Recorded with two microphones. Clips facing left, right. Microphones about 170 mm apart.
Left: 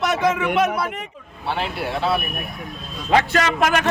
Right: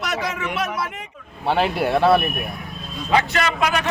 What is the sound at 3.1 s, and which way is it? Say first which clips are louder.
Speech: left 2 dB; 45° left (ahead or behind).